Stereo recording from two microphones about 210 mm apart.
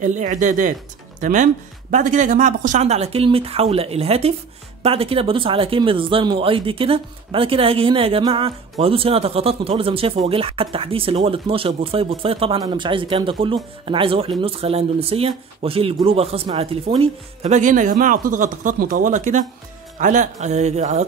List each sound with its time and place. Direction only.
0.0 s speech: 35° right (ahead or behind)